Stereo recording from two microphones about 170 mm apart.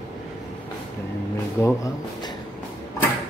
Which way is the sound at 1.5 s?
20° left (ahead or behind).